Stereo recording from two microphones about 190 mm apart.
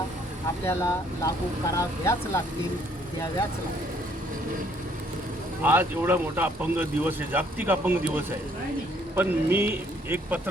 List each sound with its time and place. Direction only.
0.6 s speech: 15° left (ahead or behind)
5.6 s speech: 10° right (ahead or behind)